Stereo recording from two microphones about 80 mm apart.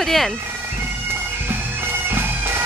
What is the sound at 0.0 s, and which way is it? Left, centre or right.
Speech, centre.